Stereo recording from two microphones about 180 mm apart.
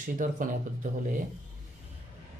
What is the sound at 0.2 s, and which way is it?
Speech, 45° right (ahead or behind).